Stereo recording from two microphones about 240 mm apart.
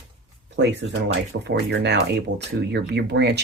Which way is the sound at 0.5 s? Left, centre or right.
Right.